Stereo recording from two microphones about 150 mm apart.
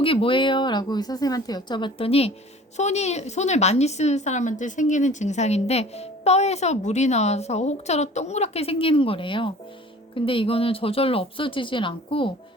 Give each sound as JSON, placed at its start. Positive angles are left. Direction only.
{"t": 0.0, "sound": "a woman's voice", "side_deg": 35}